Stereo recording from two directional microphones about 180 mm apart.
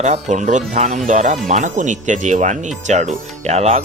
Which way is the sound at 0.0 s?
40° right (ahead or behind).